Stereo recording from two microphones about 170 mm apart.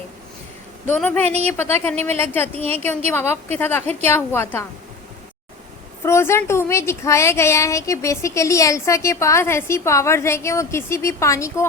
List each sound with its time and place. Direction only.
0.9 s a woman's voice: 10° left (ahead or behind)
2.6 s a woman's voice: 35° right (ahead or behind)
3.1 s a woman's voice: 15° left (ahead or behind)
6.1 s a woman's voice: 15° left (ahead or behind)